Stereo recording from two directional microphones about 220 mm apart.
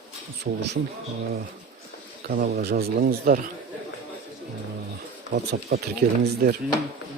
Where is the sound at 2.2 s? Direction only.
45° right (ahead or behind).